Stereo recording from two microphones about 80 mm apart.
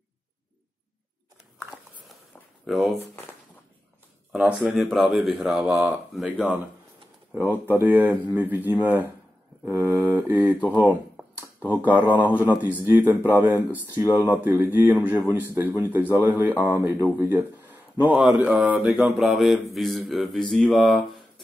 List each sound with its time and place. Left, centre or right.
2.6 s speech: centre
4.4 s speech: centre
4.6 s speech: centre
7.3 s speech: right
9.7 s a sound: right
10.0 s speech: right
11.7 s speech: right
17.3 s a sound: right
18.4 s speech: centre